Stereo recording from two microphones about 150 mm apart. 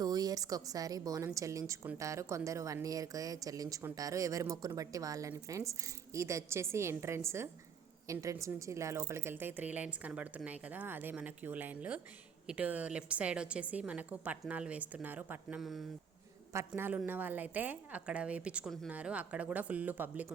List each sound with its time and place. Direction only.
0.0 s a woman's voice: 25° right (ahead or behind); by 15.9 s centre (ahead or behind)
16.5 s a woman's voice: 15° right (ahead or behind)